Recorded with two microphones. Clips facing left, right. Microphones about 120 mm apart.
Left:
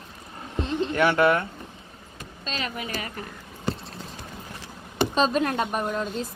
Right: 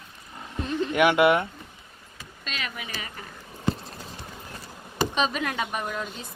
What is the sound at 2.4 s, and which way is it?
Speech, 35° left (ahead or behind).